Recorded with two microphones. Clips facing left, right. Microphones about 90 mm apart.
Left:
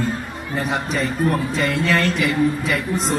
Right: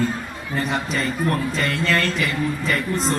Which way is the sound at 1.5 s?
10° left (ahead or behind).